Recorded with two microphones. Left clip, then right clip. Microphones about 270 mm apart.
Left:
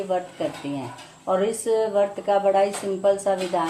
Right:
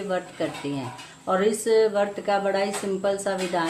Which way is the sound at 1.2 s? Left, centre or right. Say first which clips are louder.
Even; centre.